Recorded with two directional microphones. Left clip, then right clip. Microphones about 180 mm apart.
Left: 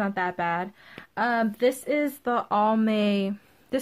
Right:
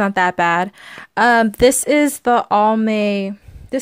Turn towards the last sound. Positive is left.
turn(degrees=-25)  # may be behind; listen again after turning